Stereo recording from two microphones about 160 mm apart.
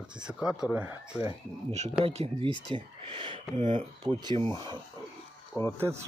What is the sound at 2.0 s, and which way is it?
Speech, 40° right (ahead or behind).